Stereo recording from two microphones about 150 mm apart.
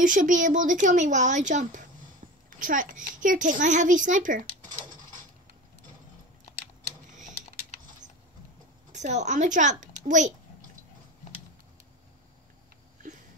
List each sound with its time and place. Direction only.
0.0 s speech: 60° right (ahead or behind)
8.9 s speech: 50° right (ahead or behind)